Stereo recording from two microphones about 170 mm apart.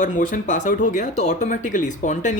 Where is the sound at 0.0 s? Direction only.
50° left (ahead or behind).